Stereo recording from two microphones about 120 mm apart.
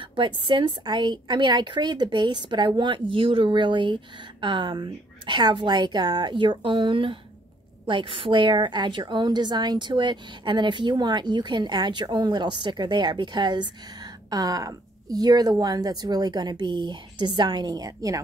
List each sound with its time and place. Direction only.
0.0 s a woman's voice: 45° right (ahead or behind); by 18.2 s 30° right (ahead or behind)